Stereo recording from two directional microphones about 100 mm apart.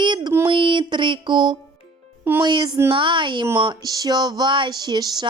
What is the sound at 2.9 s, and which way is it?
Speech, 55° right (ahead or behind).